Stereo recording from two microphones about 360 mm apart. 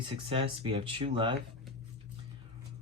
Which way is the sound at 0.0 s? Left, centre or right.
Centre.